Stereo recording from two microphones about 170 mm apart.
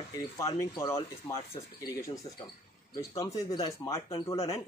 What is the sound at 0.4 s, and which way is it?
Speech, 20° left (ahead or behind).